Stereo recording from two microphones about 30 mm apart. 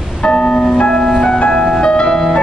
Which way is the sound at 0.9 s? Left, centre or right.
Centre.